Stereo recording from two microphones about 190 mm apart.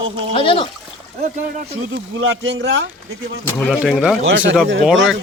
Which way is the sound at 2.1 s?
90° right.